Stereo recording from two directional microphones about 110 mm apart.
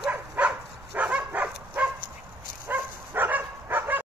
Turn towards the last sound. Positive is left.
turn(degrees=-20)  # may be behind; listen again after turning